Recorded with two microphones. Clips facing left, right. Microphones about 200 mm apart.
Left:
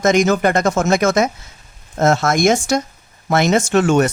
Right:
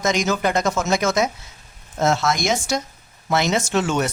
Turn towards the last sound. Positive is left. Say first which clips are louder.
# left 7 dB
turn(degrees=50)  # may be behind; listen again after turning